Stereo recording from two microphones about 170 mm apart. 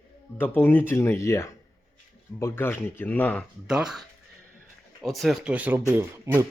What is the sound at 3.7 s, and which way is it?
Speech, 5° right (ahead or behind).